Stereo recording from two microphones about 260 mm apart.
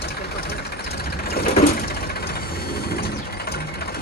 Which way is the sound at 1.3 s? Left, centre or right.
Left.